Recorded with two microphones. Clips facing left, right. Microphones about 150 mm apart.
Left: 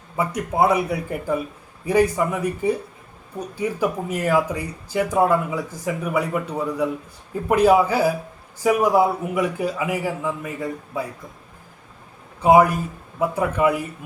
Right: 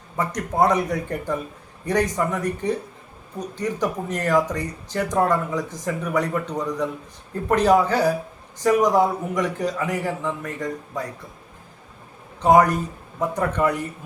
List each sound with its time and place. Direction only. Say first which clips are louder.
0.2 s speech: left 1 dB; 10° left (ahead or behind)
12.4 s speech: left 1 dB; 10° left (ahead or behind)